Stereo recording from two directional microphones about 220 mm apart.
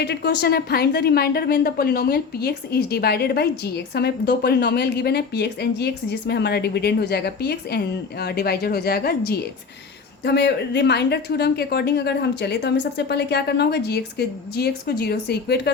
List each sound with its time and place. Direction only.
0.0 s a woman's voice: 50° left (ahead or behind)